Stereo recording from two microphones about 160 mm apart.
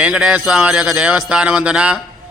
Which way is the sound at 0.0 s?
5° right (ahead or behind).